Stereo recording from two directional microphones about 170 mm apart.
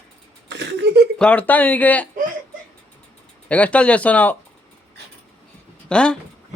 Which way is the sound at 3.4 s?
10° left (ahead or behind).